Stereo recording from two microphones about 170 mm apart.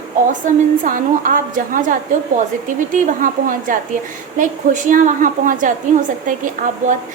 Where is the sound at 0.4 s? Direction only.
50° right (ahead or behind).